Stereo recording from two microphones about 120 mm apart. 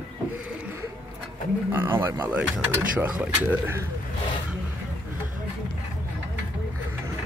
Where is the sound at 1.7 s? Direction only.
20° right (ahead or behind).